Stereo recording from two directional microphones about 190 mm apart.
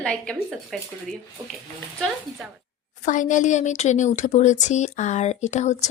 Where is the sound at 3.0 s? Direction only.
40° left (ahead or behind).